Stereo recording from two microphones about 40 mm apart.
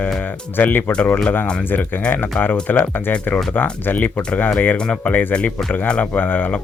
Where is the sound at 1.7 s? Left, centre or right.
Left.